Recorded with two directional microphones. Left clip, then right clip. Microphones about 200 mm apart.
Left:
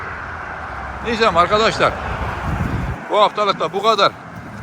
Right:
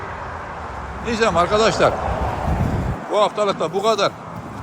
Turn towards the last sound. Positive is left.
turn(degrees=-10)  # may be behind; listen again after turning